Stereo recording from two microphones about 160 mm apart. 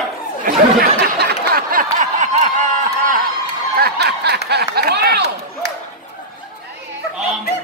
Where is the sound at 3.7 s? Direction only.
85° right.